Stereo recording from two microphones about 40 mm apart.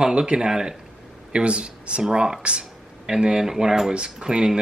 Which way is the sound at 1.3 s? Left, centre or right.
Right.